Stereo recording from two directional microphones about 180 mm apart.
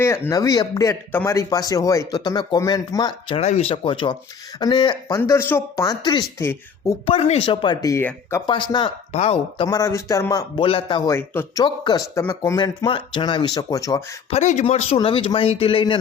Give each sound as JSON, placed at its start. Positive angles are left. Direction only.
{"t": 0.3, "sound": "speech", "side_deg": 20}
{"t": 7.0, "sound": "speech", "side_deg": 30}
{"t": 8.4, "sound": "speech", "side_deg": 25}
{"t": 9.1, "sound": "speech", "side_deg": 35}
{"t": 9.6, "sound": "speech", "side_deg": 20}
{"t": 11.1, "sound": "speech", "side_deg": 15}
{"t": 14.3, "sound": "speech", "side_deg": 40}